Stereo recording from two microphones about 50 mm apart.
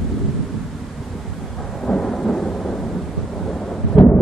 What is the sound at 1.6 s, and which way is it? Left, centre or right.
Thunder, centre.